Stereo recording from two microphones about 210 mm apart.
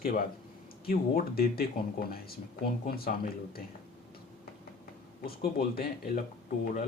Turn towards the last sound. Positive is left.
turn(degrees=40)  # may be behind; listen again after turning